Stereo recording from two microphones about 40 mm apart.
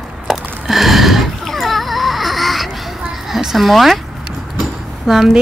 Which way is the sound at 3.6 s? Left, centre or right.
Centre.